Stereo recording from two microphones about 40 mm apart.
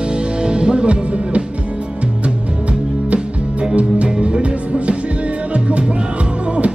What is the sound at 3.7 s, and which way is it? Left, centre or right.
Music, right.